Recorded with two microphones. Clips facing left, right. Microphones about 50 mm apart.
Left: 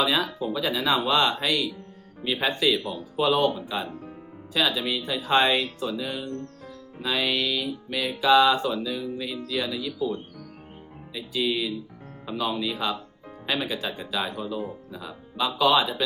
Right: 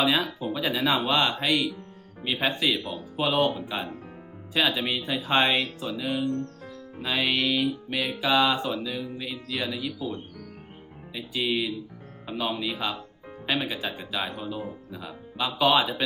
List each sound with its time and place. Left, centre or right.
0.0 s music: centre